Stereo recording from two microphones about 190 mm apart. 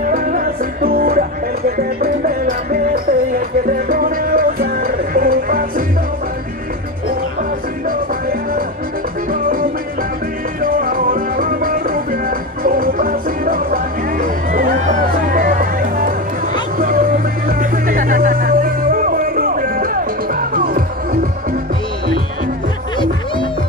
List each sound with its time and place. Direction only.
0.0 s music: 45° right (ahead or behind)
9.3 s music: 50° right (ahead or behind)